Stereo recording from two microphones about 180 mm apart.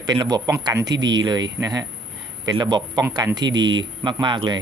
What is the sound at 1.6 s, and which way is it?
Speech, 20° right (ahead or behind).